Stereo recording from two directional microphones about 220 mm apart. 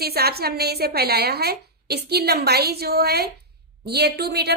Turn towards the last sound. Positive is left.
turn(degrees=-45)  # may be behind; listen again after turning